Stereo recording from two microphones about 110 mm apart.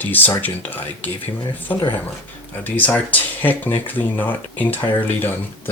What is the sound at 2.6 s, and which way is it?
Speech, 15° left (ahead or behind).